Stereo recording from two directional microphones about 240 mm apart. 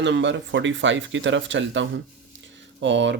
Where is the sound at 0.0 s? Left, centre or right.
Right.